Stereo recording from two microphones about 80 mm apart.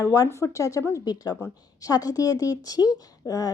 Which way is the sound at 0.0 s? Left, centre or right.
Left.